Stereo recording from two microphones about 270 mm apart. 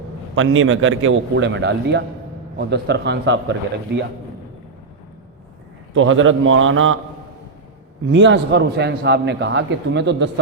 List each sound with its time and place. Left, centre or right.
0.3 s a man's voice: right
5.9 s a man's voice: right
8.1 s a man's voice: right